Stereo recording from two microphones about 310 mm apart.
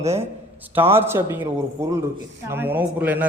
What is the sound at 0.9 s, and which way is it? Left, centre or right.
A man's voice, centre.